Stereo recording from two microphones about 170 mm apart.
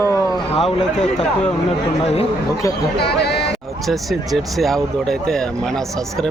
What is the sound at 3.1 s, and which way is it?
Speech, 75° left (ahead or behind).